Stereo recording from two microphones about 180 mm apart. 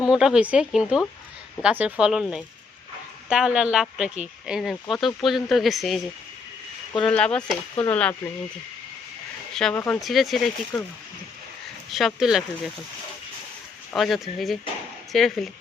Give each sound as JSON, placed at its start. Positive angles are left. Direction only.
{"t": 0.1, "sound": "speech", "side_deg": -5}
{"t": 7.0, "sound": "speech", "side_deg": 5}
{"t": 9.5, "sound": "speech", "side_deg": 0}
{"t": 10.0, "sound": "speech", "side_deg": 0}
{"t": 11.9, "sound": "speech", "side_deg": 0}
{"t": 13.9, "sound": "speech", "side_deg": 0}